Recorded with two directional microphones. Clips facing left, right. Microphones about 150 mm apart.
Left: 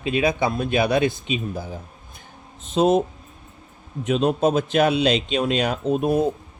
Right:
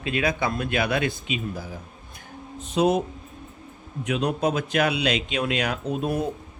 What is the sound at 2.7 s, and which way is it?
Speech, 25° left (ahead or behind).